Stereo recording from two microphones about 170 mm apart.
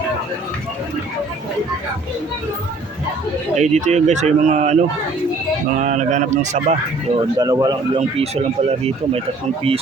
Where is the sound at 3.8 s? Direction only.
45° right (ahead or behind).